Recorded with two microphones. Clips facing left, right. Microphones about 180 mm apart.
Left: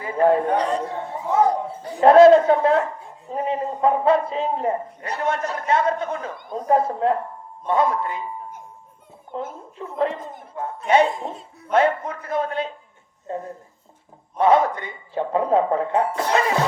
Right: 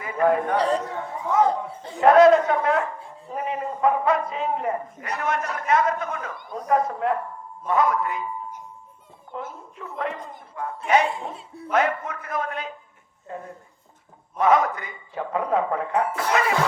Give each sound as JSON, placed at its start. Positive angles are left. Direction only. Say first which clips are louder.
{"t": 0.0, "sound": "a man's voice", "louder": "left 3 dB", "side_deg": 30}
{"t": 0.5, "sound": "a man's voice", "louder": "even", "side_deg": -35}
{"t": 0.8, "sound": "speech", "louder": "left 2 dB", "side_deg": 30}
{"t": 9.3, "sound": "speech", "louder": "left 4 dB", "side_deg": 30}